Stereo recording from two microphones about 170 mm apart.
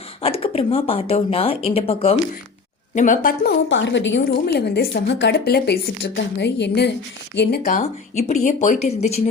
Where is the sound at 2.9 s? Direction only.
50° left (ahead or behind); by 6.9 s 85° left.